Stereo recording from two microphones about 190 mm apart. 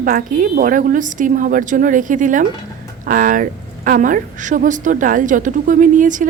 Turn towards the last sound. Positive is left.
turn(degrees=-45)  # may be behind; listen again after turning